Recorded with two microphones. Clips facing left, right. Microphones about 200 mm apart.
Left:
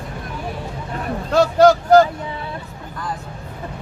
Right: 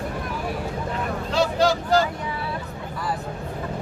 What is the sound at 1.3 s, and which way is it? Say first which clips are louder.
Speech: left 8 dB; 50° left (ahead or behind).